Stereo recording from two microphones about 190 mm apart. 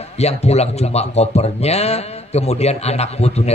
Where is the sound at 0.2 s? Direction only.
35° left (ahead or behind).